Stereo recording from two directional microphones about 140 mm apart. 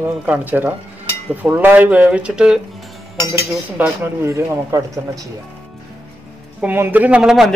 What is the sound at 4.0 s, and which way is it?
Speech, 20° right (ahead or behind).